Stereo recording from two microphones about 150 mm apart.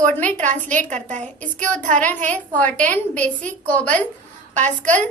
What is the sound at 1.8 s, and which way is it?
Speech, 55° right (ahead or behind).